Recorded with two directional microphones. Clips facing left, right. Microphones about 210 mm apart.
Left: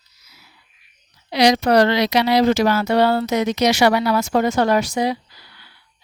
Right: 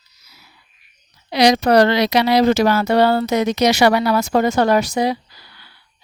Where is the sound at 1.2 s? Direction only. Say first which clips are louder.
Right 2 dB; 40° right (ahead or behind).